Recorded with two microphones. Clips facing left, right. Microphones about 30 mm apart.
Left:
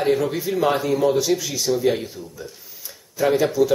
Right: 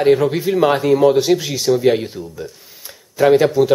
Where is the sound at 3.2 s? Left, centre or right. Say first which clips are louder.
Right 6 dB; right.